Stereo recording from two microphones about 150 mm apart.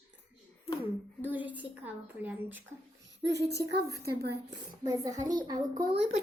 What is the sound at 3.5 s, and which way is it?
Speech, 90° right.